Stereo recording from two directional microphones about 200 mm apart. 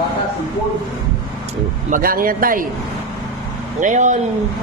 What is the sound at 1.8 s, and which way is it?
Speech, 45° right (ahead or behind).